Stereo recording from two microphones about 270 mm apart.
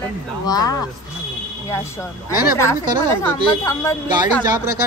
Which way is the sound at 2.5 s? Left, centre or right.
Centre.